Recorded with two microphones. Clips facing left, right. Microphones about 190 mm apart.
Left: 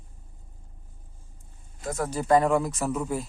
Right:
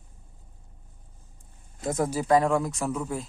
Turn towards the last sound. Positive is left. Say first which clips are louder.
# left 2 dB
turn(degrees=5)  # may be behind; listen again after turning